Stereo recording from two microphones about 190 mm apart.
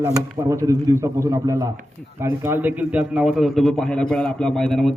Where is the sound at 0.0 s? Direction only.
15° right (ahead or behind).